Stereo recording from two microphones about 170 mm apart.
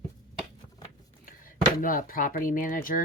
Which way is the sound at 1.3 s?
55° left (ahead or behind).